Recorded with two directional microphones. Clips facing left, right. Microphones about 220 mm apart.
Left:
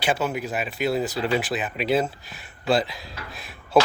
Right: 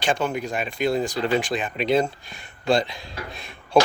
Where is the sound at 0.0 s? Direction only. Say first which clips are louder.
Right 1 dB; 5° left (ahead or behind).